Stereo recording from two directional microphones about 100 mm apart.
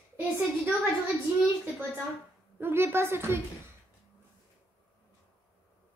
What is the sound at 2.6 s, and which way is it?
Speech, 25° right (ahead or behind).